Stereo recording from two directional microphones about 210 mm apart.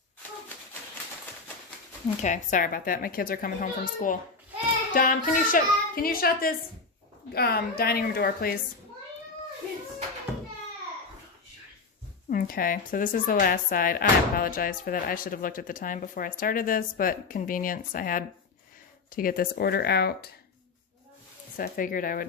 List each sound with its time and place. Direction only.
2.2 s a child's voice: 35° left (ahead or behind)
12.3 s a child's voice: 40° left (ahead or behind)
21.5 s a child's voice: 45° left (ahead or behind)